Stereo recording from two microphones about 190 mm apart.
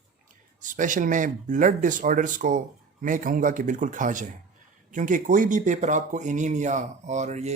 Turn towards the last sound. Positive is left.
turn(degrees=-35)  # may be behind; listen again after turning